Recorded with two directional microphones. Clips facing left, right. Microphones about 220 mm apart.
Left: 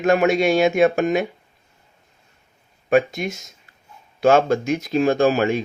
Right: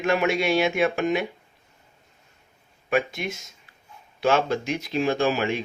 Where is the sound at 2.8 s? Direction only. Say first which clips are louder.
Left 7 dB; 45° left (ahead or behind).